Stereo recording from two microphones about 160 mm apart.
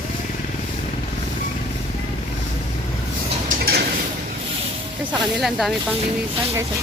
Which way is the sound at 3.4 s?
70° right (ahead or behind).